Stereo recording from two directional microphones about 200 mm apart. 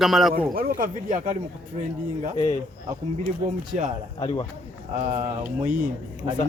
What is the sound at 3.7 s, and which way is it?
Speech, 40° right (ahead or behind).